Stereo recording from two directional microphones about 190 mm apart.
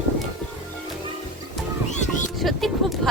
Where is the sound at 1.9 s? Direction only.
40° left (ahead or behind).